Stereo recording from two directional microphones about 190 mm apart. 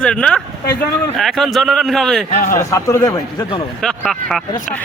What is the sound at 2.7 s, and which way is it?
Speech, 15° left (ahead or behind).